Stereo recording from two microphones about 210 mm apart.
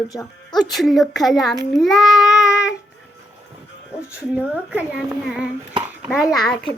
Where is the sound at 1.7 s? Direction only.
Centre (ahead or behind).